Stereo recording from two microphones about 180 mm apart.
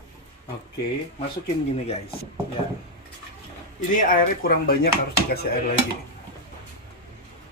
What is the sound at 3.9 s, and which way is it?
Speech, 50° left (ahead or behind).